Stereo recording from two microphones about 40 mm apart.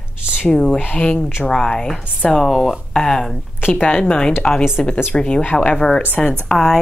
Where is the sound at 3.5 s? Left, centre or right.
Left.